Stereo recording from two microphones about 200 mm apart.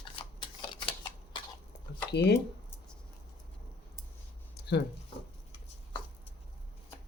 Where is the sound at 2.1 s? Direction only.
55° left (ahead or behind).